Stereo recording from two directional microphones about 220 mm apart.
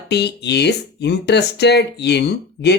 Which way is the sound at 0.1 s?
50° left (ahead or behind).